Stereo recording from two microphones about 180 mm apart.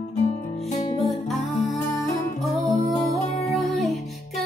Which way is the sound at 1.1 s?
Centre (ahead or behind).